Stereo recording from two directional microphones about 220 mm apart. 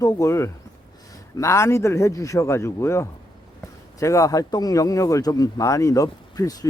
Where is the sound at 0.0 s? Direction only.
15° left (ahead or behind).